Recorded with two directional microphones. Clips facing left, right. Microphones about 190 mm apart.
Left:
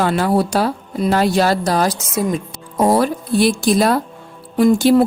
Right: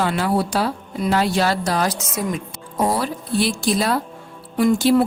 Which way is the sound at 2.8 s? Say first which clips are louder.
Left 6 dB; 45° left (ahead or behind).